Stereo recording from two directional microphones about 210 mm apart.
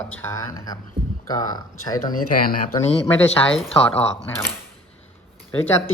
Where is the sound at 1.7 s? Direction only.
90° left.